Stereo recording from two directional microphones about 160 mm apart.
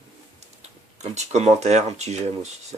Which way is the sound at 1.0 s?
45° right (ahead or behind).